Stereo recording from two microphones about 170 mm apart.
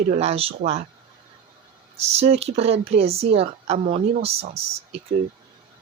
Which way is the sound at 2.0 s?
40° right (ahead or behind).